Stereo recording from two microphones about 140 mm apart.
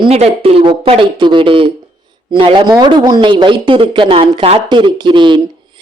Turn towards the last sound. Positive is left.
turn(degrees=-35)  # may be behind; listen again after turning